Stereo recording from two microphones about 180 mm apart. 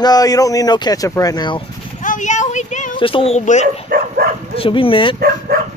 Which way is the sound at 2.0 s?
45° left (ahead or behind).